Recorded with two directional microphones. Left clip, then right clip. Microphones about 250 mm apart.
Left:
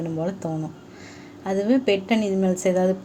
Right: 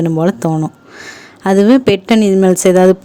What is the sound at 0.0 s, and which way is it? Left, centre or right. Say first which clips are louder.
A woman's voice: right 13 dB; right.